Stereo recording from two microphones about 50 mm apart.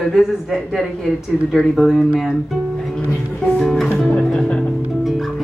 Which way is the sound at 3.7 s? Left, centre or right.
Centre.